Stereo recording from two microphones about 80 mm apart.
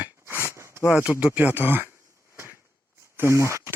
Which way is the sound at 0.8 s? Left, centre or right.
Right.